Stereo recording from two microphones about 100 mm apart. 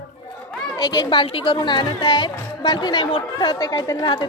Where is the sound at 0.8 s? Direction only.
45° left (ahead or behind); by 1.5 s 60° left (ahead or behind).